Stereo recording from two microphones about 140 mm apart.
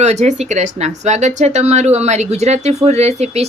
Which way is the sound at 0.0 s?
55° right (ahead or behind).